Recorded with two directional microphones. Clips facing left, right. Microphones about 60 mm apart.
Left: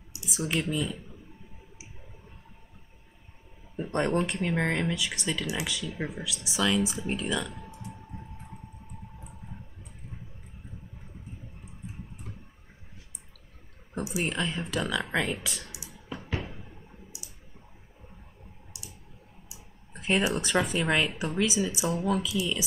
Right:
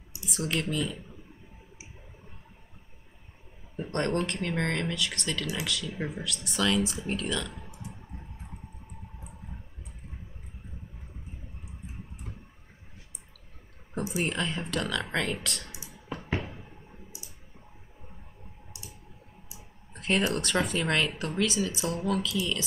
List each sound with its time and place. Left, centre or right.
0.3 s speech: centre
3.7 s speech: centre
5.8 s speech: centre
14.2 s speech: centre
19.9 s speech: centre